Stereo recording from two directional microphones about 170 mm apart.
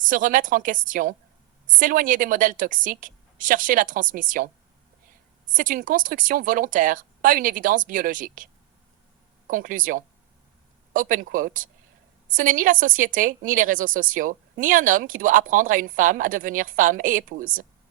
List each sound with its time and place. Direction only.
0.0 s a woman's voice: 50° right (ahead or behind)
5.5 s a woman's voice: 50° right (ahead or behind)
9.5 s a woman's voice: 50° right (ahead or behind)